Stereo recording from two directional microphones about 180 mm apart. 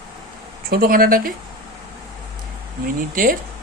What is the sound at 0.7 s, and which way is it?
Speech, 55° right (ahead or behind).